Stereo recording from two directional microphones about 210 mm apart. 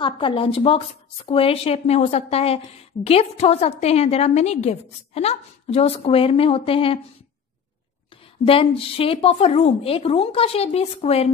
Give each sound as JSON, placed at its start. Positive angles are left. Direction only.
{"t": 0.0, "sound": "a woman's voice", "side_deg": 25}
{"t": 8.5, "sound": "a woman's voice", "side_deg": 25}